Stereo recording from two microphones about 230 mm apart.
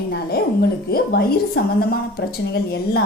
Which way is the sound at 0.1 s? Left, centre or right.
Left.